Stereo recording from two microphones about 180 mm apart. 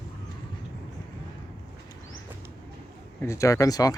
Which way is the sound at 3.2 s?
15° left (ahead or behind).